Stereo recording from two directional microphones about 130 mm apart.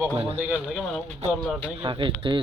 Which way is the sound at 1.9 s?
40° right (ahead or behind).